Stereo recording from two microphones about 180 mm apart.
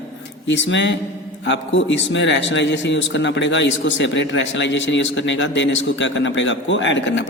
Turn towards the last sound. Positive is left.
turn(degrees=85)